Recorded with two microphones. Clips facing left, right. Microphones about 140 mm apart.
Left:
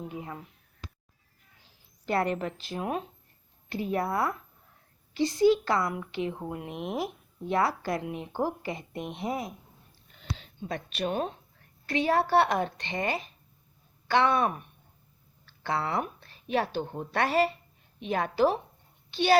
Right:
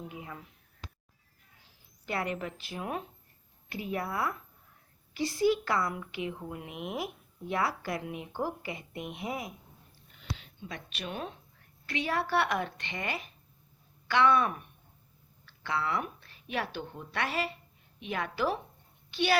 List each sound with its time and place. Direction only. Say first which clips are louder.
0.1 s speech: left 5 dB; 30° left (ahead or behind)
2.0 s speech: left 6 dB; 35° left (ahead or behind)
10.2 s a sound: left 3 dB; 35° left (ahead or behind)
11.9 s speech: left 6 dB; 35° left (ahead or behind)
15.6 s speech: left 3 dB; 35° left (ahead or behind)